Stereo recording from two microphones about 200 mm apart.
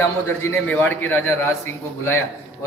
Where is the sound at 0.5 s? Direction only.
10° left (ahead or behind).